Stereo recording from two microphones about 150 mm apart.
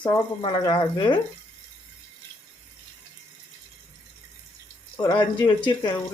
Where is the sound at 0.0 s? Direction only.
30° left (ahead or behind).